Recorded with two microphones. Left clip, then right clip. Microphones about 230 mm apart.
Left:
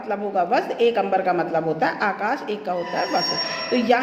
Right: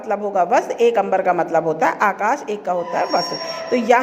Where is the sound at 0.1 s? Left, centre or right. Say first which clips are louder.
Right 4 dB; right.